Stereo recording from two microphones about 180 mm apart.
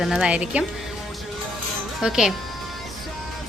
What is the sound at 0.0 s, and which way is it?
Speech, 5° right (ahead or behind).